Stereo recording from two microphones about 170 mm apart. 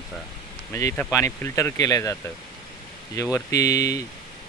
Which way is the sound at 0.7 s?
15° left (ahead or behind).